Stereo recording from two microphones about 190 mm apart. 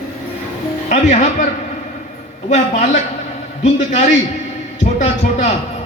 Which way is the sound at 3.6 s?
35° left (ahead or behind).